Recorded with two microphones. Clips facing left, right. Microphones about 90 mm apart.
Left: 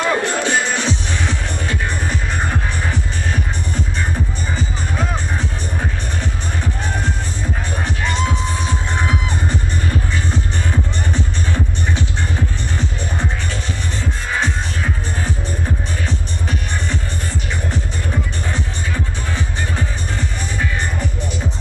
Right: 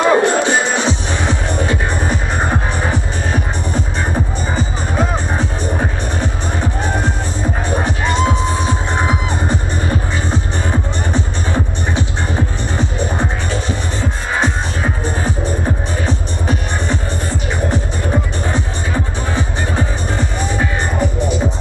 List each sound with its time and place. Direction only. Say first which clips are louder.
0.0 s music: right 6 dB; 15° right (ahead or behind)
14.3 s music: right 3 dB; 20° right (ahead or behind)
19.3 s music: right 5 dB; 15° right (ahead or behind)